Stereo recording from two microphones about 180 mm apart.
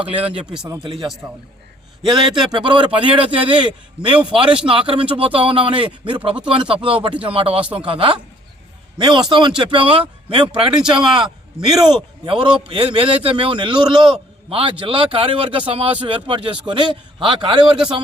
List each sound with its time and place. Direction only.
1.2 s speech: 5° right (ahead or behind)
2.0 s a man's voice: 25° right (ahead or behind)
4.4 s speech: 5° right (ahead or behind)
4.7 s a man's voice: 30° right (ahead or behind)